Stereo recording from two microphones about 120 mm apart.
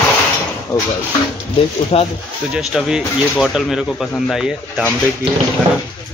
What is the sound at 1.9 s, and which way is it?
Speech, 55° left (ahead or behind).